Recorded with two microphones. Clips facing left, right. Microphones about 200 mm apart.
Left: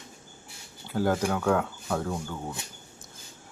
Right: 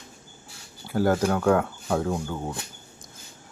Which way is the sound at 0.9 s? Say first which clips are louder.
Right 4 dB; 10° right (ahead or behind).